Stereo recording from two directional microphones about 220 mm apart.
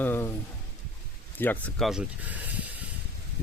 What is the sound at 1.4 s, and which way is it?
Speech, 5° left (ahead or behind).